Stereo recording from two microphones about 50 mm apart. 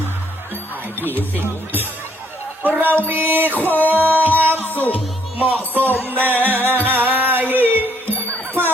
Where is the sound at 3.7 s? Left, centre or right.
Left.